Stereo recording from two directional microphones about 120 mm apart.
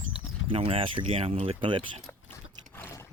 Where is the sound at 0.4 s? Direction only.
50° right (ahead or behind).